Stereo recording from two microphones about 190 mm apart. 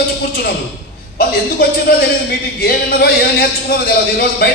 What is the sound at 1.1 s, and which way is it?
Speech, 50° left (ahead or behind).